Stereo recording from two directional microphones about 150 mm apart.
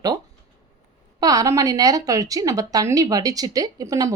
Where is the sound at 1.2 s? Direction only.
25° right (ahead or behind).